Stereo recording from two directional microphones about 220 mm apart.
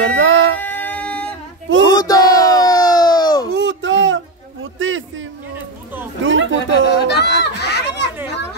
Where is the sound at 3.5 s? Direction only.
55° right (ahead or behind).